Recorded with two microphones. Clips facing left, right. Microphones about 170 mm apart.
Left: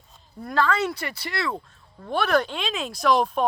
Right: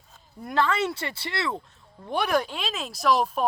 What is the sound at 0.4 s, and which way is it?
Speech, 20° right (ahead or behind).